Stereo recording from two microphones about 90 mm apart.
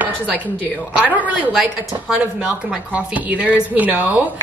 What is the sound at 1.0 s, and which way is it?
Speech, 15° right (ahead or behind).